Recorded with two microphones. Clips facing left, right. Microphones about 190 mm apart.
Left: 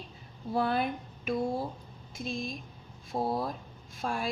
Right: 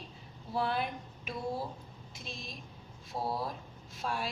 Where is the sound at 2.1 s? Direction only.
50° left (ahead or behind).